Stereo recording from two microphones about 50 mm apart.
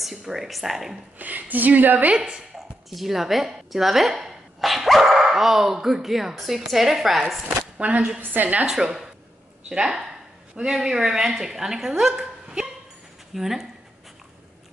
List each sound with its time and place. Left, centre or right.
0.0 s speech: centre
1.1 s a woman's voice: right
2.1 s a woman's voice: centre
2.9 s speech: centre
7.7 s a woman's voice: right
8.6 s a woman's voice: centre